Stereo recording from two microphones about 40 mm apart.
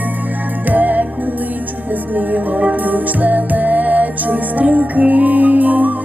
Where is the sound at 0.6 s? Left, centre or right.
Right.